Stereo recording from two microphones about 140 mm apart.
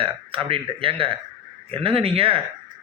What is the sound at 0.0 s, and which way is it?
A man's voice, 40° right (ahead or behind).